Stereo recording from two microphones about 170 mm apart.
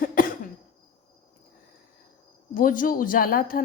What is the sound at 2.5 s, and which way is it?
A woman's voice, 55° left (ahead or behind).